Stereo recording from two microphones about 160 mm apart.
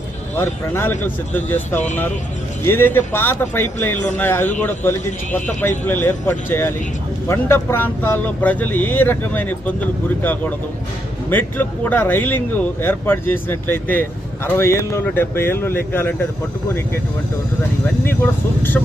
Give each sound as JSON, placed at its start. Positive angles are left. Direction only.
{"t": 0.3, "sound": "speech", "side_deg": 15}
{"t": 11.3, "sound": "speech", "side_deg": 10}
{"t": 18.0, "sound": "speech", "side_deg": 15}